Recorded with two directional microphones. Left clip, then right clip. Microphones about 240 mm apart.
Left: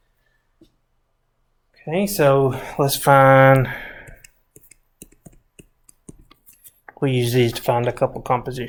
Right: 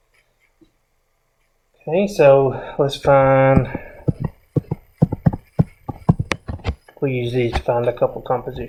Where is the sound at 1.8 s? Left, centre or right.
Left.